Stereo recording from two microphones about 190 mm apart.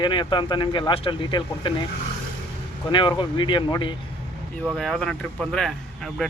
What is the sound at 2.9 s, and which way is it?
Speech, 25° left (ahead or behind).